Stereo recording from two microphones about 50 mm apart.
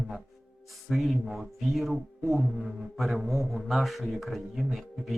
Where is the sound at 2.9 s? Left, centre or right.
Centre.